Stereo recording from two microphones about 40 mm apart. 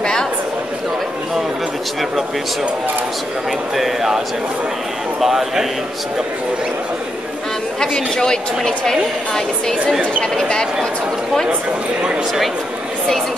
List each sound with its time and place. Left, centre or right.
0.0 s a sound: centre
3.7 s speech: centre
5.2 s a man's voice: centre
7.8 s a woman's voice: centre